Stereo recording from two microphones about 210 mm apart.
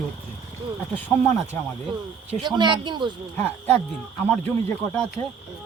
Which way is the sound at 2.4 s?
20° right (ahead or behind).